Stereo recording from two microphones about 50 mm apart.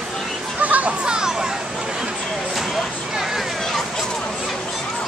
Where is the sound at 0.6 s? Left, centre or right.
Right.